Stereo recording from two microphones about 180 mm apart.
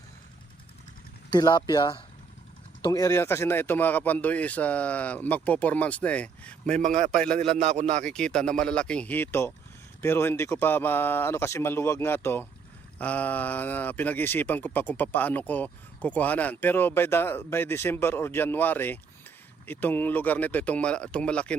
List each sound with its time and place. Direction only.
1.3 s speech: 25° left (ahead or behind); by 6.8 s 5° left (ahead or behind)
6.8 s speech: 40° right (ahead or behind)
7.2 s speech: 5° left (ahead or behind)
7.5 s speech: 40° right (ahead or behind)
8.0 s speech: 5° left (ahead or behind)